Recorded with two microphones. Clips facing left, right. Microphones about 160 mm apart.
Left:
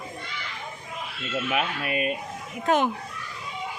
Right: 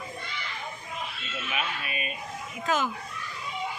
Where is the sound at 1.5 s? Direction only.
60° left (ahead or behind).